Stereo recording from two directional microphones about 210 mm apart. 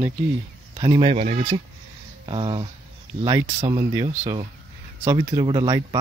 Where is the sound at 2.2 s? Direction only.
20° right (ahead or behind).